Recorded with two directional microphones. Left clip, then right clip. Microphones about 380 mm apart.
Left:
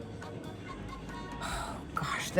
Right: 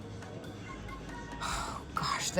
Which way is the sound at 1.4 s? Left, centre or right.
Centre.